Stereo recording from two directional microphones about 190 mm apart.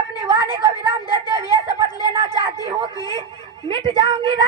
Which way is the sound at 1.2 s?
20° left (ahead or behind).